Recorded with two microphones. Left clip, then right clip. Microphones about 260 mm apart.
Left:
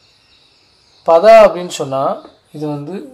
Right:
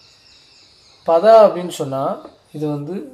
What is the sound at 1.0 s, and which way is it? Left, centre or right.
A man's voice, left.